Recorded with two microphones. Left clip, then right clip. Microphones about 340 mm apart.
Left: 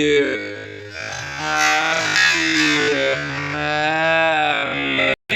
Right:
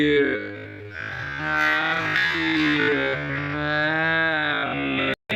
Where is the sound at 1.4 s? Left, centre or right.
Centre.